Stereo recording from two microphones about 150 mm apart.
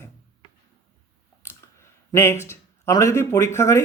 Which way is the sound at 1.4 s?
15° left (ahead or behind).